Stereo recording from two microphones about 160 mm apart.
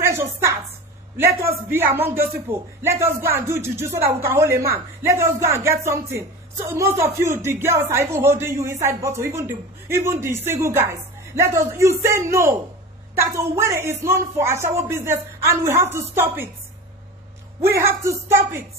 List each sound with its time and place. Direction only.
0.0 s a sound: 15° right (ahead or behind)
1.1 s a man's voice: 15° right (ahead or behind)
17.6 s a man's voice: 15° right (ahead or behind)